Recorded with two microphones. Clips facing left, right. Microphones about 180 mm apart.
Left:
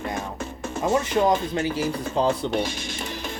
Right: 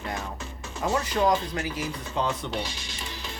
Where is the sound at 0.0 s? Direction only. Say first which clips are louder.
Left 4 dB; 50° left (ahead or behind).